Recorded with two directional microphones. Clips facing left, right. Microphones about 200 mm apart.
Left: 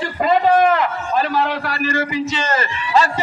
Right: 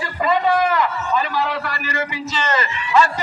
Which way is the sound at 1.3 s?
45° left (ahead or behind).